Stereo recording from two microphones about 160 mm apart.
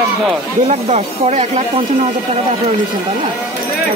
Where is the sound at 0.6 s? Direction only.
45° right (ahead or behind).